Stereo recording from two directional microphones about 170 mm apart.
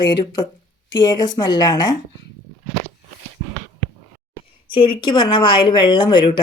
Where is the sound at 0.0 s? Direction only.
25° left (ahead or behind).